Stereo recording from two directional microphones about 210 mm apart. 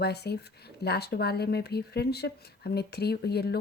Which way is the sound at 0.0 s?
50° left (ahead or behind).